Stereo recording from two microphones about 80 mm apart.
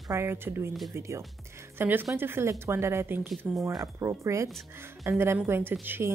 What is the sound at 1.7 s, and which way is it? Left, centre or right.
Speech, right.